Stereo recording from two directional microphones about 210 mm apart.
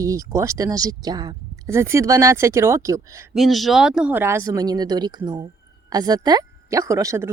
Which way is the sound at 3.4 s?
Centre (ahead or behind).